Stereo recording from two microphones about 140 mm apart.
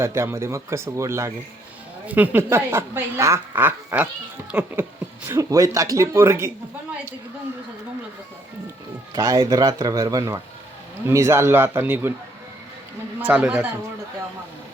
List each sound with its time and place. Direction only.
0.0 s speech: 20° right (ahead or behind)
9.1 s speech: 25° right (ahead or behind)
13.1 s speech: 10° right (ahead or behind)